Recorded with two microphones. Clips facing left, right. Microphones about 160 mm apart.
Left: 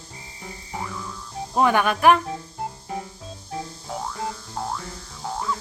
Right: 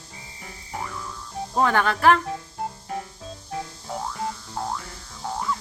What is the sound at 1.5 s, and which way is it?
Speech, 15° left (ahead or behind).